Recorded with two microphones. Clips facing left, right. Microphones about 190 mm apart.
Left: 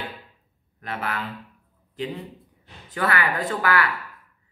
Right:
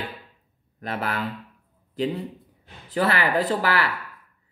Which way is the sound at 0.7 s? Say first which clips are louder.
Right 2 dB; 35° right (ahead or behind).